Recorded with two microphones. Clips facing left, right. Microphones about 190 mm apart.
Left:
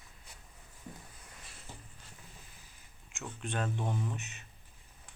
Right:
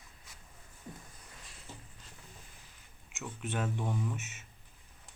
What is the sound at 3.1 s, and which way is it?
Speech, 5° right (ahead or behind).